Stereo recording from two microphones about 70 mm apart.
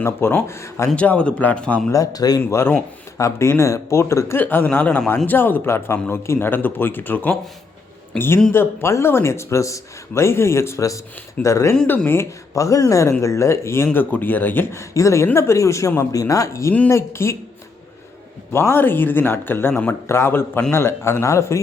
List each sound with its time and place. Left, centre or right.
0.0 s speech: left
0.9 s a man's voice: centre
1.9 s speech: left
2.4 s speech: left
4.4 s a man's voice: left
8.1 s speech: centre
8.5 s speech: left
18.5 s speech: left